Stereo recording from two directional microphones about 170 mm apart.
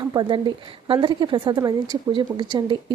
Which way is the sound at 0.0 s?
25° right (ahead or behind).